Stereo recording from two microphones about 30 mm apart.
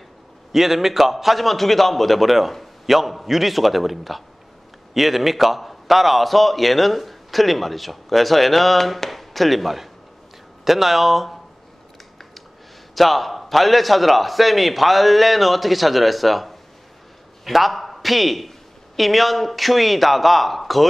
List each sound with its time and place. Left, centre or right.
0.5 s a man's voice: centre
12.9 s a man's voice: centre